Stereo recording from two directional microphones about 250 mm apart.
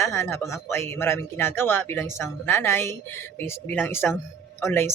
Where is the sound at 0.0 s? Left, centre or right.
Centre.